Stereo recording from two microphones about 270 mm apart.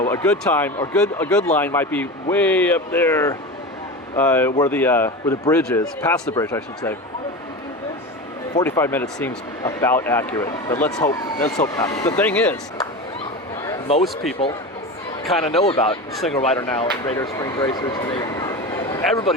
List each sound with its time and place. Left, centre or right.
0.0 s speech: centre
8.5 s speech: centre
13.9 s speech: left
15.6 s speech: centre